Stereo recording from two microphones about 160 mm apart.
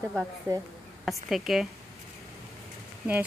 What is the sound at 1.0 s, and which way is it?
Speech, centre (ahead or behind).